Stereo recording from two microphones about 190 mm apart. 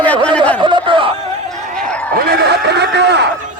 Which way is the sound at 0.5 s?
25° right (ahead or behind).